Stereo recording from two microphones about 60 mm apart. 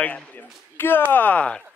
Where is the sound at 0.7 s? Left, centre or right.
Left.